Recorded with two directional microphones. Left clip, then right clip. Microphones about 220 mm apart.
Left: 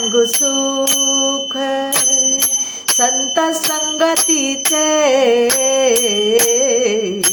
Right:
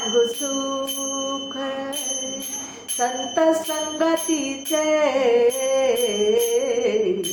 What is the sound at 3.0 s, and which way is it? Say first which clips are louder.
Music: left 5 dB; 50° left (ahead or behind).